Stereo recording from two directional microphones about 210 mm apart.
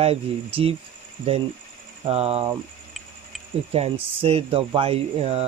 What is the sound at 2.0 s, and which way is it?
Speech, 30° right (ahead or behind).